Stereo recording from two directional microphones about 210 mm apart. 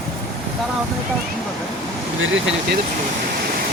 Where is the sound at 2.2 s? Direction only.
65° right (ahead or behind).